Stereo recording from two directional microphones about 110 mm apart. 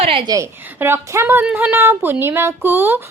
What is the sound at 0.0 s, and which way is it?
Speech, 55° right (ahead or behind).